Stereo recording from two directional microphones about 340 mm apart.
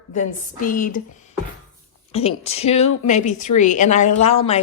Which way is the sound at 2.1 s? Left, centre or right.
Centre.